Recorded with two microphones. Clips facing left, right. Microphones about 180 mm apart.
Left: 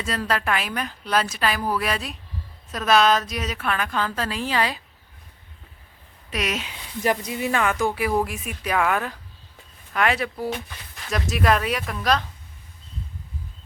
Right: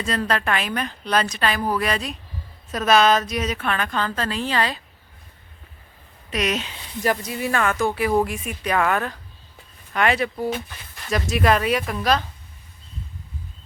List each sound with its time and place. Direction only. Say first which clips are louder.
0.0 s speech: right 2 dB; 5° left (ahead or behind)
6.3 s speech: right 3 dB; 5° left (ahead or behind)
7.0 s speech: even; 20° left (ahead or behind); by 12.2 s centre (ahead or behind)